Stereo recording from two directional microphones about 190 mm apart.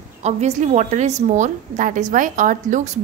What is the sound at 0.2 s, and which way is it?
A woman's voice, 35° right (ahead or behind).